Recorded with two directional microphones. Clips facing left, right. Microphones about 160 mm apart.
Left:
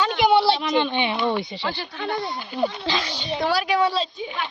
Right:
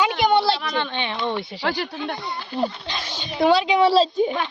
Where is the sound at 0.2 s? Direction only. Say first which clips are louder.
Left 5 dB; 10° left (ahead or behind).